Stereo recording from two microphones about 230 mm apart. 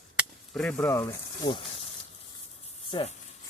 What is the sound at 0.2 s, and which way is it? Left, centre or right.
Chop, centre.